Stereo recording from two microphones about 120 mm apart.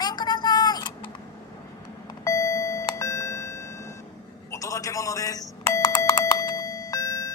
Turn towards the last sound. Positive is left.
turn(degrees=30)  # may be behind; listen again after turning